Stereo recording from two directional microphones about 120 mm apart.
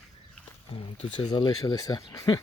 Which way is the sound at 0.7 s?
50° left (ahead or behind).